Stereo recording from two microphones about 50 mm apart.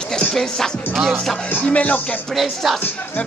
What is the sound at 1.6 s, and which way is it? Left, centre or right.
Speech, left.